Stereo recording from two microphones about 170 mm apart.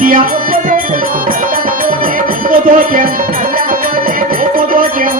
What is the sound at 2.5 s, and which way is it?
Music, 55° right (ahead or behind).